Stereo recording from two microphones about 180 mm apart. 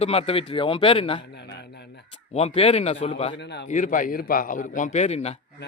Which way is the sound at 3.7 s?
45° left (ahead or behind).